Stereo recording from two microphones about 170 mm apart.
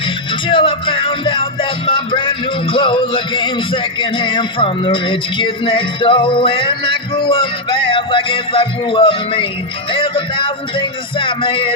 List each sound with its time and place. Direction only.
0.4 s music: 30° left (ahead or behind)